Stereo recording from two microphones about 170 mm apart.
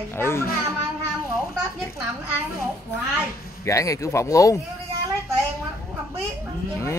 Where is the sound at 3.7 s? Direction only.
20° left (ahead or behind).